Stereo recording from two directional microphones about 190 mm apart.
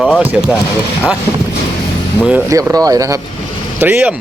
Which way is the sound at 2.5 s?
15° right (ahead or behind).